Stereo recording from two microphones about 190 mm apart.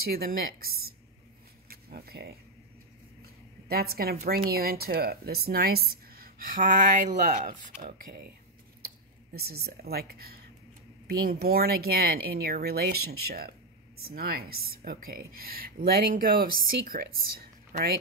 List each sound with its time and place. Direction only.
0.0 s a woman's voice: 50° right (ahead or behind)
1.7 s a sound: 55° right (ahead or behind)
3.6 s a woman's voice: 55° right (ahead or behind)
9.4 s a woman's voice: 55° right (ahead or behind)